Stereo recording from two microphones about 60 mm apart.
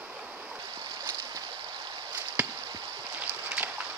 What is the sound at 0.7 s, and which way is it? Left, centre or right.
Stream, right.